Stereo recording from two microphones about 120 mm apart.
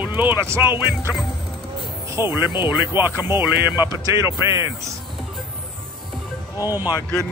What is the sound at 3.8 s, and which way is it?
Speech, 25° right (ahead or behind).